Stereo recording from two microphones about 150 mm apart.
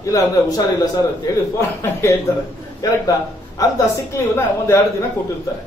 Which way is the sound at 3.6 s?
20° left (ahead or behind).